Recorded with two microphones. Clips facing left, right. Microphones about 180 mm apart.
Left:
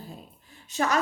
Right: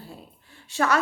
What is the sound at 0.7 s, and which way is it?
Speech, 20° left (ahead or behind).